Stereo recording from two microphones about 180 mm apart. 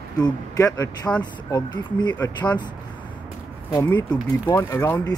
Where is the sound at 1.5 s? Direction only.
25° left (ahead or behind).